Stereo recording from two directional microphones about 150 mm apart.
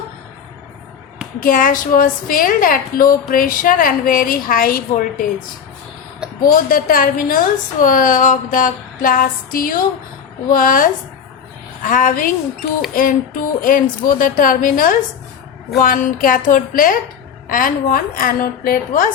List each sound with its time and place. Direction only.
1.4 s a woman's voice: 65° left (ahead or behind)
6.4 s a woman's voice: 70° left (ahead or behind)